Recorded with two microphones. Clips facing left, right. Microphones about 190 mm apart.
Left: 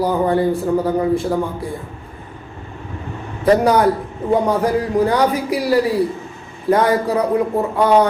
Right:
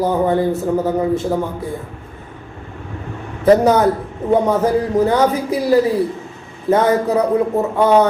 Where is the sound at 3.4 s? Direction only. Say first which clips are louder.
Right 2 dB; 25° right (ahead or behind).